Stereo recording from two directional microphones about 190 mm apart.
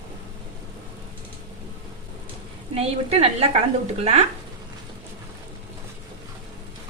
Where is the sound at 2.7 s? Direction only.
30° right (ahead or behind).